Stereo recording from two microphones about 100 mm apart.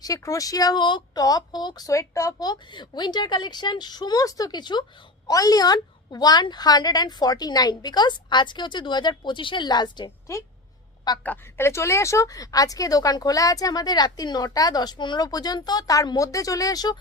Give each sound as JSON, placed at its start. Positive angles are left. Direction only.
{"t": 0.0, "sound": "a woman's voice", "side_deg": 35}
{"t": 11.2, "sound": "speech", "side_deg": 20}